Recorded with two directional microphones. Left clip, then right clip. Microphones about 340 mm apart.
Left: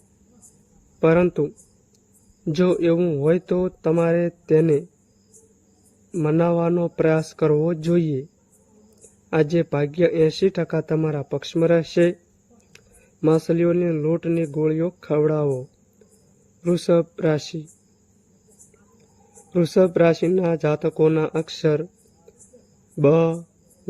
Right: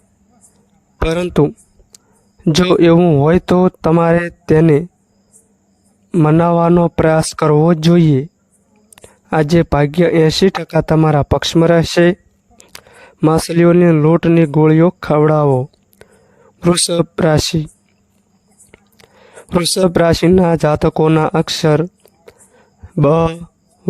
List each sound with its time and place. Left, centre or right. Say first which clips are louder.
1.3 s a sound: right 10 dB; right
2.4 s speech: right 9 dB; right
6.1 s speech: right 8 dB; right
9.3 s speech: right 7 dB; right
13.2 s a man's voice: right 7 dB; right
19.8 s speech: right 5 dB; right
23.0 s speech: right 5 dB; right